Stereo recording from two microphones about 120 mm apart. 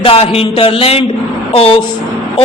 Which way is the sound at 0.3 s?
50° left (ahead or behind).